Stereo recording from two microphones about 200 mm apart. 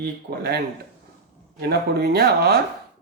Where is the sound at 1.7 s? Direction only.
50° right (ahead or behind).